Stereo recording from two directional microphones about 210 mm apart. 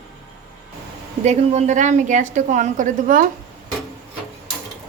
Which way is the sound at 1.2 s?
35° right (ahead or behind).